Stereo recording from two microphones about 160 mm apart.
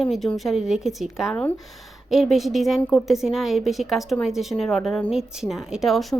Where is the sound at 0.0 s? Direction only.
Centre (ahead or behind).